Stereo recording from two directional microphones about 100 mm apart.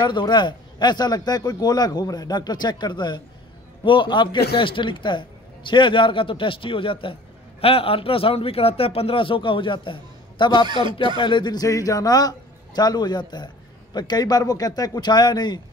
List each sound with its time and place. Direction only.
0.0 s a man's voice: 50° left (ahead or behind)
10.7 s speech: 50° right (ahead or behind)
11.1 s a man's voice: 50° left (ahead or behind)